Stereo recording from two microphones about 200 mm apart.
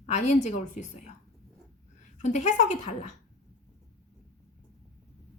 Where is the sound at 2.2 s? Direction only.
35° left (ahead or behind).